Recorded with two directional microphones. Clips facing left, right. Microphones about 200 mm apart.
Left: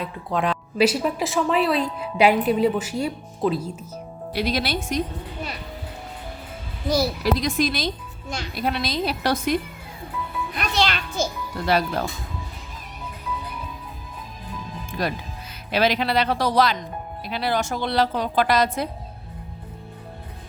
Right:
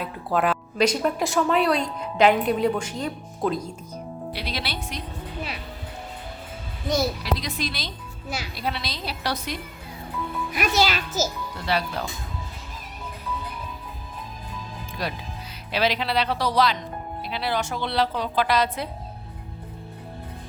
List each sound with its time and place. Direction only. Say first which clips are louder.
0.0 s a woman's voice: right 1 dB; 5° right (ahead or behind)
4.3 s a woman's voice: left 9 dB; 45° left (ahead or behind)
6.8 s a woman's voice: left 2 dB; centre (ahead or behind)
7.3 s a woman's voice: left 7 dB; 45° left (ahead or behind)
10.5 s a child's voice: right 2 dB; 5° right (ahead or behind)
11.6 s a woman's voice: left 5 dB; 45° left (ahead or behind)
15.0 s a woman's voice: left 4 dB; 50° left (ahead or behind)